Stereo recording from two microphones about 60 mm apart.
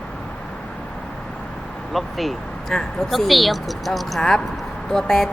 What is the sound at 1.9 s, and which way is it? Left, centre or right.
Speech, centre.